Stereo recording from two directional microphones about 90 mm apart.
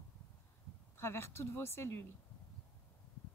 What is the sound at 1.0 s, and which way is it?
A woman's voice, 30° left (ahead or behind).